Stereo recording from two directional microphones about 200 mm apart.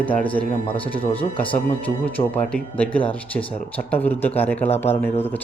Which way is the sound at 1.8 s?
5° left (ahead or behind).